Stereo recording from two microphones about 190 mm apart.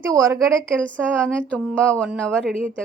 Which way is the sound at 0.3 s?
5° left (ahead or behind).